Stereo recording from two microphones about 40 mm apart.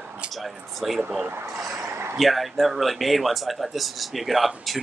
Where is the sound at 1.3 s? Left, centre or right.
Right.